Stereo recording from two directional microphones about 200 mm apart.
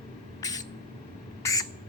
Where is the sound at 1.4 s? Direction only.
15° left (ahead or behind).